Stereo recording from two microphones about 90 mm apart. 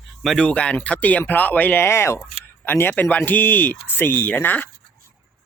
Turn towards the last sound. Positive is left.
turn(degrees=25)  # may be behind; listen again after turning